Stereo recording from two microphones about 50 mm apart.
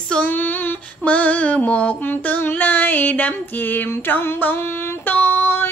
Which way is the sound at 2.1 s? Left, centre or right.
Left.